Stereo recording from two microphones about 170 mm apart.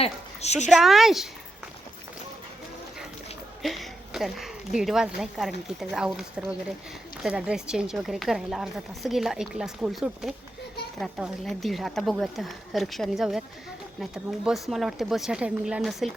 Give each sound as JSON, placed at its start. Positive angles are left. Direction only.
{"t": 0.0, "sound": "speech", "side_deg": 40}
{"t": 0.7, "sound": "speech", "side_deg": 0}
{"t": 3.6, "sound": "a sound", "side_deg": 0}
{"t": 4.8, "sound": "speech", "side_deg": -5}